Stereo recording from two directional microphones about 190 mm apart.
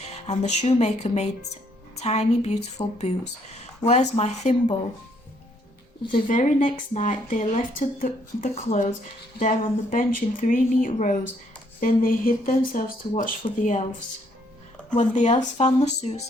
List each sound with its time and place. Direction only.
0.0 s speech: 35° left (ahead or behind)
6.2 s speech: 40° left (ahead or behind)
14.9 s speech: 40° left (ahead or behind)